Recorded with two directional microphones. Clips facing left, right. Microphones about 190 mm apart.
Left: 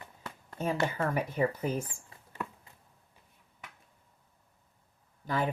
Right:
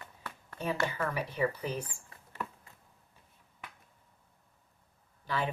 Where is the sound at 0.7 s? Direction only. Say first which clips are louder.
Left 2 dB; 25° left (ahead or behind).